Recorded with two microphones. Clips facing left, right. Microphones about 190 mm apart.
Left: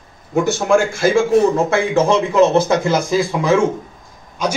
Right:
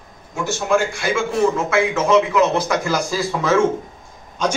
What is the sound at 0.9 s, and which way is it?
A man's voice, 40° left (ahead or behind).